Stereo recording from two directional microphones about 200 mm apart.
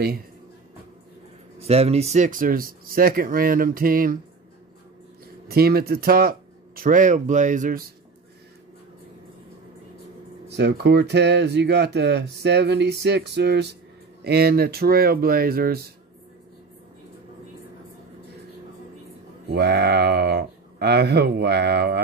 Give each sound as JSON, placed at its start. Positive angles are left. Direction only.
{"t": 1.6, "sound": "speech", "side_deg": -30}
{"t": 5.5, "sound": "speech", "side_deg": -50}
{"t": 10.5, "sound": "speech", "side_deg": -55}
{"t": 19.5, "sound": "speech", "side_deg": -55}